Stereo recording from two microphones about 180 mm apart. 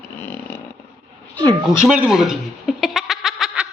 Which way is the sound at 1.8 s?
5° right (ahead or behind).